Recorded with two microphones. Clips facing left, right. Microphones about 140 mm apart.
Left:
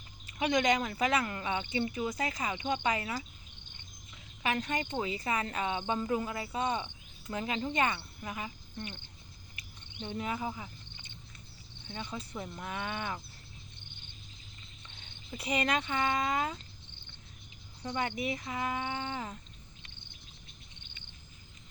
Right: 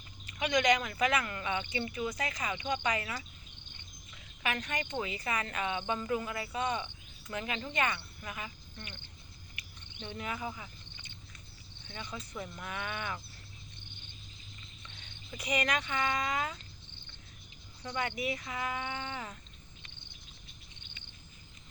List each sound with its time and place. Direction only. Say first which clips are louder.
0.3 s speech: even; 25° left (ahead or behind)
4.4 s speech: left 3 dB; 25° left (ahead or behind)
10.0 s speech: left 3 dB; 25° left (ahead or behind)
11.9 s speech: left 3 dB; 25° left (ahead or behind)
15.4 s speech: left 1 dB; 30° left (ahead or behind)
17.8 s speech: left 1 dB; 25° left (ahead or behind)